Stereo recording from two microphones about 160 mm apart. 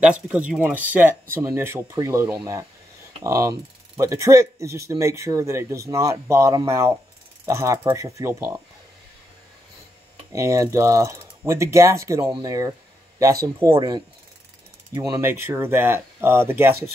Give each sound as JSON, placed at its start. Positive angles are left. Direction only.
{"t": 0.0, "sound": "speech", "side_deg": -10}
{"t": 10.3, "sound": "speech", "side_deg": -20}
{"t": 13.7, "sound": "speech", "side_deg": -30}